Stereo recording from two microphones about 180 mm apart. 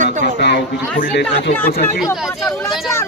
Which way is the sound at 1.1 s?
70° left (ahead or behind).